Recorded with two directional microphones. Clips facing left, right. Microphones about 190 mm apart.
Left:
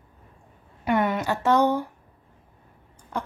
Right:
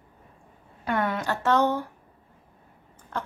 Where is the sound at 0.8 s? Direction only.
15° left (ahead or behind).